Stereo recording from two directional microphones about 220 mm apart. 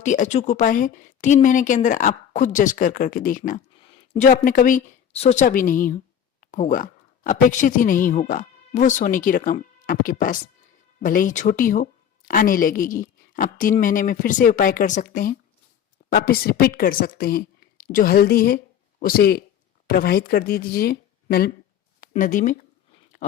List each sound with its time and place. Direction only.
0.0 s a woman's voice: 35° left (ahead or behind)